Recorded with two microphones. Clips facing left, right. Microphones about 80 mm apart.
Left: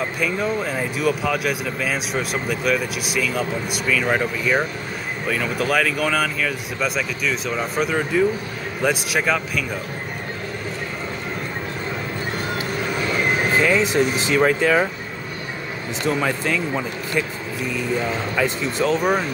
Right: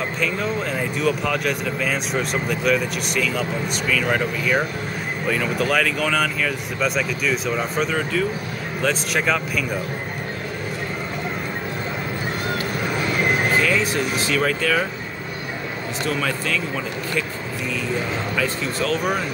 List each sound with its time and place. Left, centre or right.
0.2 s speech: centre
13.6 s speech: left
16.1 s speech: centre
18.3 s speech: centre